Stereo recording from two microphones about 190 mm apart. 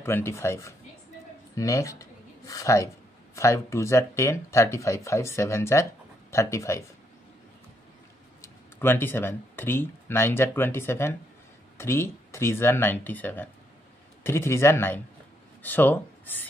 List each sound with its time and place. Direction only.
0.0 s speech: 15° left (ahead or behind)
8.4 s speech: 10° left (ahead or behind)